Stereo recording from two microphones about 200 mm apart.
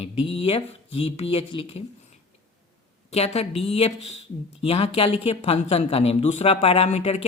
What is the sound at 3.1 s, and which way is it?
Speech, 30° left (ahead or behind).